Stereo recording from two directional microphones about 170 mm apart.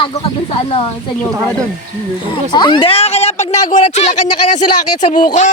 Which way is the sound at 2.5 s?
25° left (ahead or behind).